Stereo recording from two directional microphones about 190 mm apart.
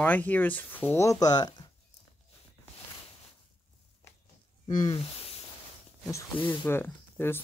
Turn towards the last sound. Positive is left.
turn(degrees=10)  # may be behind; listen again after turning